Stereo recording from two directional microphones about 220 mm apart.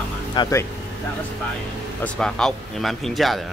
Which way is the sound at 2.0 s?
5° left (ahead or behind).